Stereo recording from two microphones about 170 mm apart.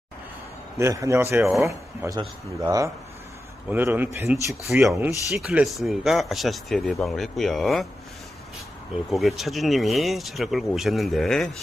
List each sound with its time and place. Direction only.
0.7 s a man's voice: 15° right (ahead or behind); by 7.9 s centre (ahead or behind)
8.9 s speech: centre (ahead or behind)